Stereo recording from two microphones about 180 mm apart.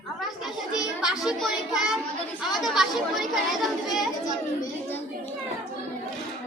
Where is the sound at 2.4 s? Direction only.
Centre (ahead or behind).